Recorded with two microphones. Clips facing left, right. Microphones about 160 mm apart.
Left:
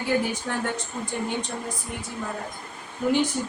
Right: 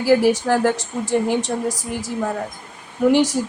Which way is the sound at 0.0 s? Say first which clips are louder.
Right 10 dB; 85° right.